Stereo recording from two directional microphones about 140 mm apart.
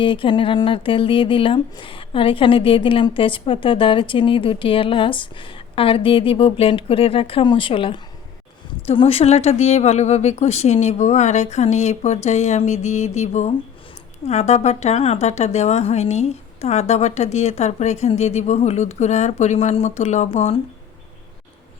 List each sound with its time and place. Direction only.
0.0 s a woman's voice: 35° left (ahead or behind); by 20.6 s 50° left (ahead or behind)